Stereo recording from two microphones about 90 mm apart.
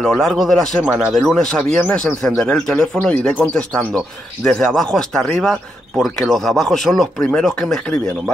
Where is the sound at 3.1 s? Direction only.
15° left (ahead or behind).